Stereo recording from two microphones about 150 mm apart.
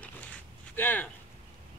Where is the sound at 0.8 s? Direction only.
10° left (ahead or behind).